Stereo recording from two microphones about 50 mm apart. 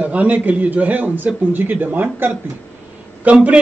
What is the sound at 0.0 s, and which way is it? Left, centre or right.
A man's voice, right.